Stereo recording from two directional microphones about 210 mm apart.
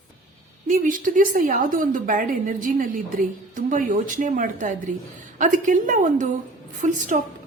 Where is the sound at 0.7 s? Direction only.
40° right (ahead or behind).